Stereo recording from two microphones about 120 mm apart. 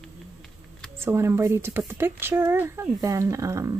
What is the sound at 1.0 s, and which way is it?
Speech, 20° right (ahead or behind).